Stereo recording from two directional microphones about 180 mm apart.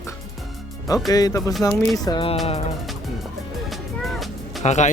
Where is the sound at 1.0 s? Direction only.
20° left (ahead or behind); by 2.6 s 35° left (ahead or behind).